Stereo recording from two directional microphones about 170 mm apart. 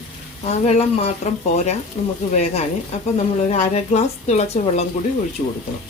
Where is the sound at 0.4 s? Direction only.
40° left (ahead or behind).